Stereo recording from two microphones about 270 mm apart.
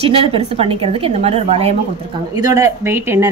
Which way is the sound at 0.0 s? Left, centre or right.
Right.